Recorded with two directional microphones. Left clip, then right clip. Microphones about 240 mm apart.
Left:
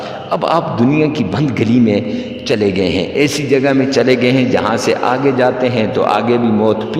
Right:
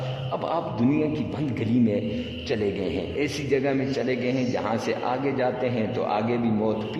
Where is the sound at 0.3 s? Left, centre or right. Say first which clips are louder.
Left 13 dB; left.